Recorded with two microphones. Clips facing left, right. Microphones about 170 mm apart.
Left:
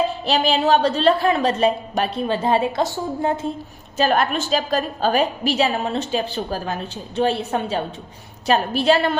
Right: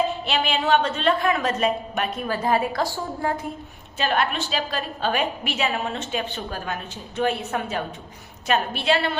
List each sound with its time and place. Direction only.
0.3 s a woman's voice: 35° left (ahead or behind); by 3.3 s 20° left (ahead or behind)
3.9 s a woman's voice: 40° left (ahead or behind)